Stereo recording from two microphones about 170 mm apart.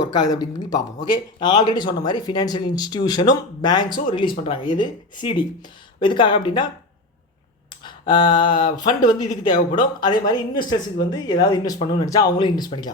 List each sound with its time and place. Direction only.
0.0 s speech: 25° left (ahead or behind)
7.9 s a sound: 30° left (ahead or behind)
8.9 s speech: 25° left (ahead or behind)